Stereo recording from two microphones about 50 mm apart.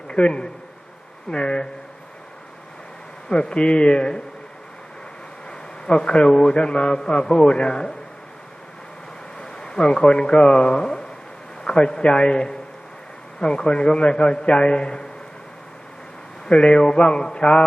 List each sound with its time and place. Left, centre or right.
0.1 s a man's voice: centre
3.2 s a man's voice: left
5.5 s a man's voice: centre
9.4 s a man's voice: centre
16.5 s a man's voice: centre